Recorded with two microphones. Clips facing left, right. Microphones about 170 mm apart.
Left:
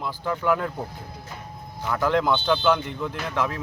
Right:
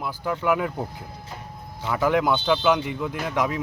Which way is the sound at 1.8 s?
5° right (ahead or behind).